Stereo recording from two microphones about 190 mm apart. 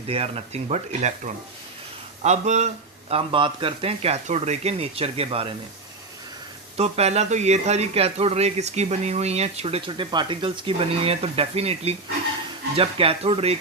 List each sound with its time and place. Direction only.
0.1 s speech: 30° right (ahead or behind)
6.7 s speech: 35° right (ahead or behind)